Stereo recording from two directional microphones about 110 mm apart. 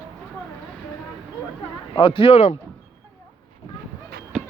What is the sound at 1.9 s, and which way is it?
Speech, 55° left (ahead or behind).